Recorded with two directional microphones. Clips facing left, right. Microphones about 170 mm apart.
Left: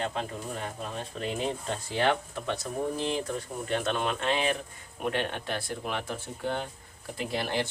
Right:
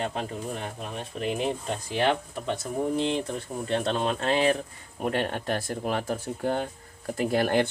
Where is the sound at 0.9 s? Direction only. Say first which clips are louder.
Right 6 dB; 15° right (ahead or behind).